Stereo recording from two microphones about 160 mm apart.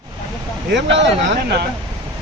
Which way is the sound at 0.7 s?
90° right.